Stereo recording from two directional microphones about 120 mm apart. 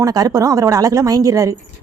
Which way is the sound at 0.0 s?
30° right (ahead or behind).